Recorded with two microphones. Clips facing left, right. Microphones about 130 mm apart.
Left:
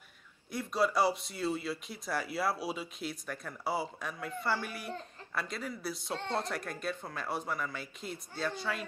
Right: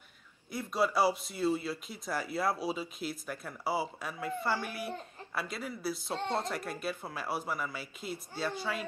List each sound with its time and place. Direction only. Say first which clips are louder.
0.5 s speech: even; centre (ahead or behind)
6.1 s speech: right 1 dB; 20° right (ahead or behind)
6.5 s speech: right 1 dB; 5° right (ahead or behind)